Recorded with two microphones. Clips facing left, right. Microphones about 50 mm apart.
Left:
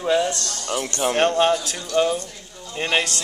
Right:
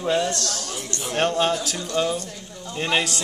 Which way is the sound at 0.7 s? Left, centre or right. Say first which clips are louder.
Left 8 dB; left.